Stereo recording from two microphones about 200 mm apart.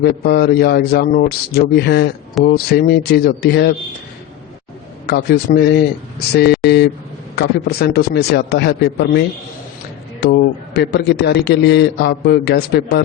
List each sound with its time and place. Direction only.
0.0 s a man's voice: 50° left (ahead or behind)
5.0 s a man's voice: 50° left (ahead or behind)
10.8 s a man's voice: 55° left (ahead or behind)